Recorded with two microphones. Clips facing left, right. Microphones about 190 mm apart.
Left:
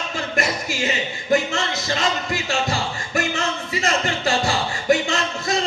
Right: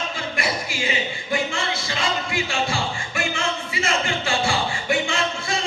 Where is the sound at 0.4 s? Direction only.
45° left (ahead or behind).